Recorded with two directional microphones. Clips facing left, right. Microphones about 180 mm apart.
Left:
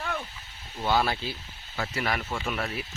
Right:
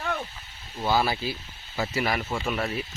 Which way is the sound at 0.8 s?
5° right (ahead or behind).